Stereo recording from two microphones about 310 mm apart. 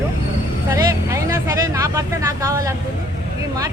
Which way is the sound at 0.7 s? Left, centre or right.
Centre.